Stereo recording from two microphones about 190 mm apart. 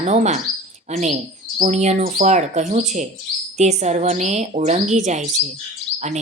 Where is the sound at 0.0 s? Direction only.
35° right (ahead or behind).